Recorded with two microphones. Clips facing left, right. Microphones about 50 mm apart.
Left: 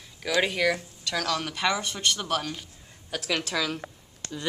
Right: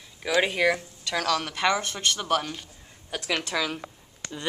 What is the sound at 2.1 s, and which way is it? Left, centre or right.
Speech, centre.